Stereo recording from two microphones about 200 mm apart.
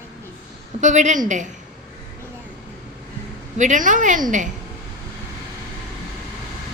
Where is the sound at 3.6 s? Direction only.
40° right (ahead or behind).